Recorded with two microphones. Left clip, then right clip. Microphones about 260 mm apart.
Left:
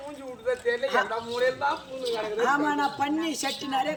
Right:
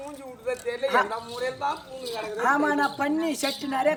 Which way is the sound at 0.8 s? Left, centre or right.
Centre.